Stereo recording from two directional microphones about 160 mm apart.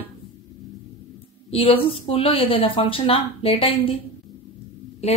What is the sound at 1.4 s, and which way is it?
Speech, 35° left (ahead or behind).